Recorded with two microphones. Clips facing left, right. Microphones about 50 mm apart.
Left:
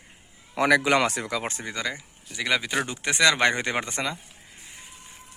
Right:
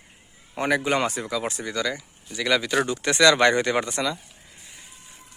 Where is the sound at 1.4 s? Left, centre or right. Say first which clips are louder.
Right 3 dB; left.